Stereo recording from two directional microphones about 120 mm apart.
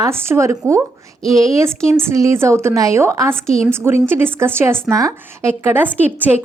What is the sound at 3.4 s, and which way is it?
Speech, 5° left (ahead or behind).